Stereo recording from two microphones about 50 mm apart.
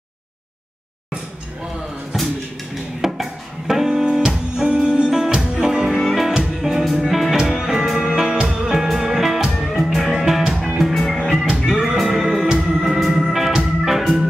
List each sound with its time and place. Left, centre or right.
2.1 s music: centre
11.6 s music: centre
12.0 s organ: centre
13.6 s music: centre